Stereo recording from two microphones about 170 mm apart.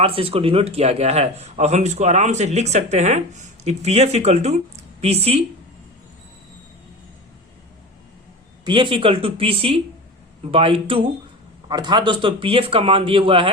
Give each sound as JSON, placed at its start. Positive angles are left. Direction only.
{"t": 0.0, "sound": "a man's voice", "side_deg": -35}
{"t": 8.6, "sound": "a man's voice", "side_deg": -30}